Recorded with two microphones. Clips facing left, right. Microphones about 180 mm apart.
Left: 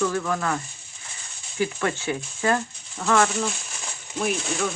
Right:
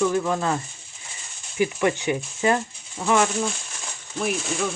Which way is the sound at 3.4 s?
Centre (ahead or behind).